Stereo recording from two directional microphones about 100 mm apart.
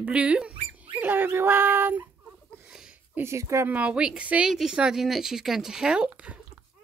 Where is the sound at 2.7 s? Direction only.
5° right (ahead or behind).